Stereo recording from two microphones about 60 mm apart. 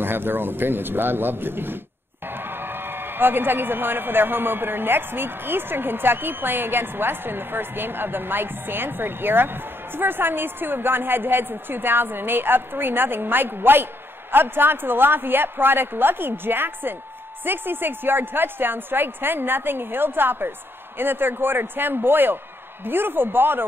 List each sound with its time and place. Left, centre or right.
0.0 s a man's voice: right